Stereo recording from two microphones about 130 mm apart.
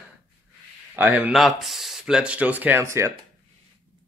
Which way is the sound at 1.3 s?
Centre (ahead or behind).